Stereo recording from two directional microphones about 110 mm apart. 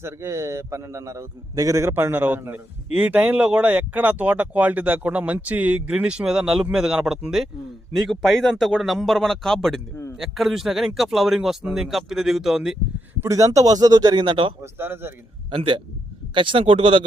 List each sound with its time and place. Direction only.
0.0 s a man's voice: 25° right (ahead or behind); by 9.8 s 5° left (ahead or behind)
9.9 s a man's voice: 25° left (ahead or behind)
10.2 s speech: centre (ahead or behind)
13.2 s a man's voice: 30° right (ahead or behind); by 14.5 s 50° right (ahead or behind)
14.6 s a man's voice: 20° right (ahead or behind)
15.4 s a man's voice: 50° right (ahead or behind)